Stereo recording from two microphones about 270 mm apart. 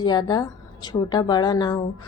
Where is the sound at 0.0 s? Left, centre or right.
Centre.